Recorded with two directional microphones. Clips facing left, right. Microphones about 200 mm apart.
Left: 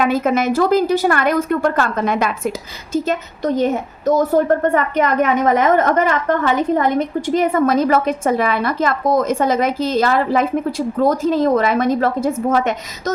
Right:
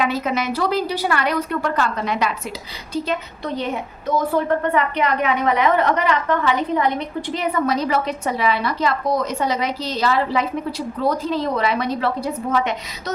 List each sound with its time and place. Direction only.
0.0 s a woman's voice: 50° left (ahead or behind)